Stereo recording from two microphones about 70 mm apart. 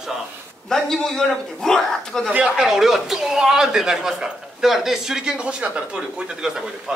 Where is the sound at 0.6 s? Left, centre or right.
Centre.